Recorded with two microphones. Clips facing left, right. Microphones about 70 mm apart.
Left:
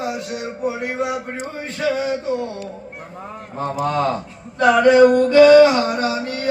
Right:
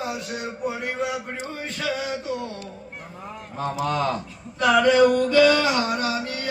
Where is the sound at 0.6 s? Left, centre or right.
Centre.